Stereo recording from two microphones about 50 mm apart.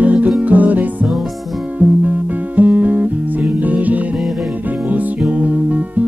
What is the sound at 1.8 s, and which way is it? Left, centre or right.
Music, right.